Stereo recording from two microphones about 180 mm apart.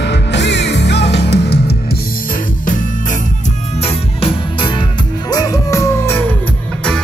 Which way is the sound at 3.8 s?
30° left (ahead or behind).